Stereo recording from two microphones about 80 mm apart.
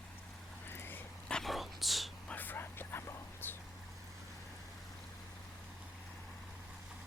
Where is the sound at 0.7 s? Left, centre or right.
Left.